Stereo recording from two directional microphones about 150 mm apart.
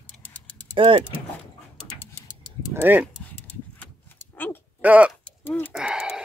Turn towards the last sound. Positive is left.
turn(degrees=-5)  # may be behind; listen again after turning